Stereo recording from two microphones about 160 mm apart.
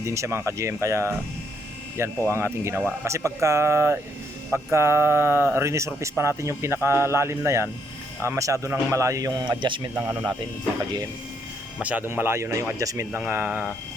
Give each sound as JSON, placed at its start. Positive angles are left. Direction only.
{"t": 0.0, "sound": "speech", "side_deg": -20}
{"t": 9.9, "sound": "speech", "side_deg": -10}
{"t": 11.8, "sound": "speech", "side_deg": -10}